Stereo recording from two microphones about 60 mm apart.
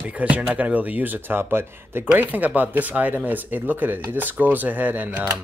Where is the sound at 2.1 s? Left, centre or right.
Right.